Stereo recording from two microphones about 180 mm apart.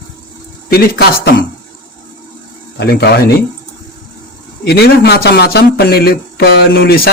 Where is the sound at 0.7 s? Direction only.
60° left (ahead or behind).